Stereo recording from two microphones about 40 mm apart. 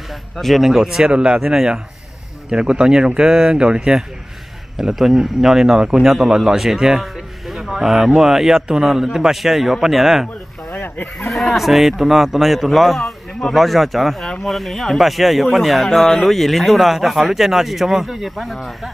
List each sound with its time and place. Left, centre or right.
0.1 s a man's voice: centre
0.7 s a man's voice: centre
1.0 s speech: right
3.2 s a man's voice: centre
3.5 s speech: right
4.9 s a man's voice: centre
6.0 s a man's voice: centre
7.4 s a sound: centre
7.8 s a man's voice: centre
10.7 s goat: left
11.2 s speech: centre